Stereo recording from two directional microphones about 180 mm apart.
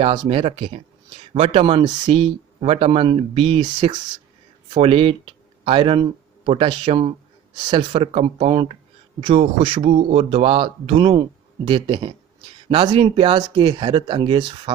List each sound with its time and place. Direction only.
0.0 s speech: 30° right (ahead or behind)